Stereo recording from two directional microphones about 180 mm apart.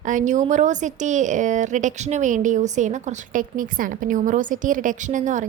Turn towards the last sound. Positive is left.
turn(degrees=-45)  # may be behind; listen again after turning